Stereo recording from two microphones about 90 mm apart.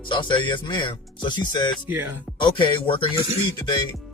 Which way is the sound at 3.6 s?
55° left (ahead or behind).